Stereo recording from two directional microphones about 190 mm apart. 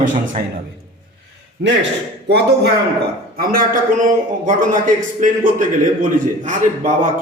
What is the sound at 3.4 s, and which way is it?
A man's voice, 50° right (ahead or behind).